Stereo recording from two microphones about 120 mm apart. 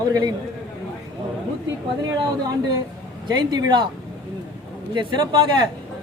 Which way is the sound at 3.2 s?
35° right (ahead or behind).